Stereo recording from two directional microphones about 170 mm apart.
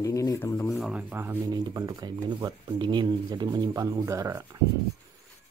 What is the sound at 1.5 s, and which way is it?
Speech, 25° right (ahead or behind).